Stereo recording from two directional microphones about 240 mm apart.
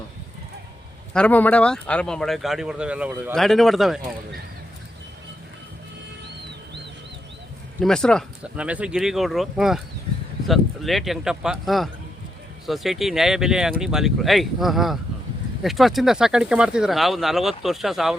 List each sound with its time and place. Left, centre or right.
1.1 s speech: centre
7.8 s speech: centre